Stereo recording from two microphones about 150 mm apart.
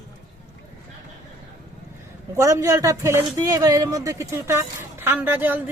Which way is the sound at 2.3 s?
20° right (ahead or behind).